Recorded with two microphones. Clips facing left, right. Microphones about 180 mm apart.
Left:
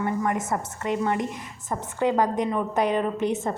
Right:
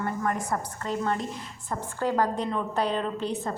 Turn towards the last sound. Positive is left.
turn(degrees=20)  # may be behind; listen again after turning